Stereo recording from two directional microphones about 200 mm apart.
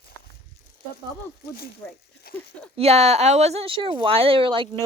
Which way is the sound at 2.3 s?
50° left (ahead or behind).